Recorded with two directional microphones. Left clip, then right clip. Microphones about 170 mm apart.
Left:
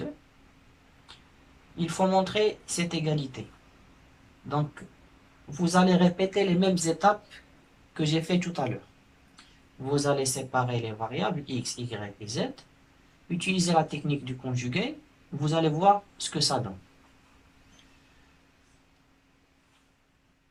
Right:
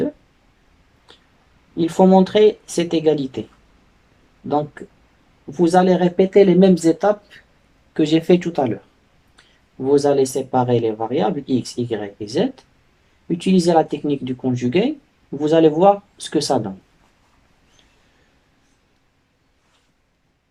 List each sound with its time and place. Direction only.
1.7 s speech: 50° right (ahead or behind)
4.4 s speech: 50° right (ahead or behind)
9.8 s speech: 50° right (ahead or behind)
13.7 s speech: 50° right (ahead or behind)